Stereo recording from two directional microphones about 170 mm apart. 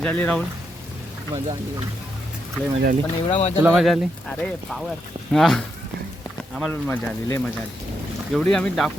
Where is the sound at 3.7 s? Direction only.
Centre (ahead or behind).